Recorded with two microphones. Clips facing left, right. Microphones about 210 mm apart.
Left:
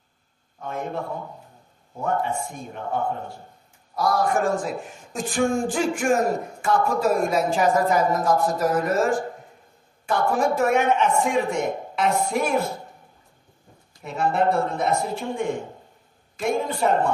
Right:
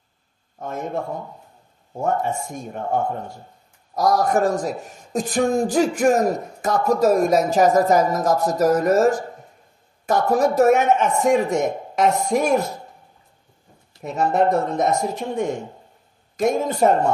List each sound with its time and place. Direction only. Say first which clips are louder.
2.0 s a man's voice: right 3 dB; 45° right (ahead or behind)
10.0 s a man's voice: right 4 dB; 40° right (ahead or behind)
14.0 s a man's voice: right 3 dB; 40° right (ahead or behind)